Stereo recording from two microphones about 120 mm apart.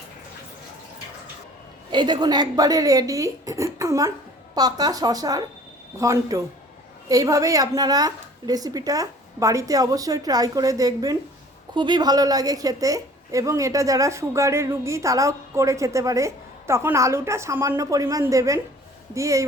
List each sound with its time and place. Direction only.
1.9 s a woman's voice: 40° right (ahead or behind)